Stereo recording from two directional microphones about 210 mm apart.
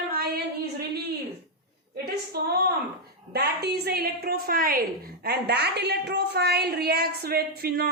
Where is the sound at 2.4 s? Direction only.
50° right (ahead or behind).